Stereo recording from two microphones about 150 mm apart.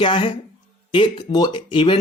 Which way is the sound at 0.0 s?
35° left (ahead or behind).